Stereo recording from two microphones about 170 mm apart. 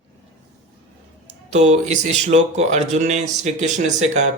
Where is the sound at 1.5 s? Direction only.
40° right (ahead or behind).